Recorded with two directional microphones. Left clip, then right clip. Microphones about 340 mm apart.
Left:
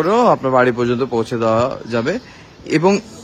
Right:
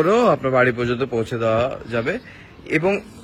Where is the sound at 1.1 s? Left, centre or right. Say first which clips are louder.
Left 3 dB; left.